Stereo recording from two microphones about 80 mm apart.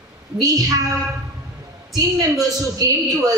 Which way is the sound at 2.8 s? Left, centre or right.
Right.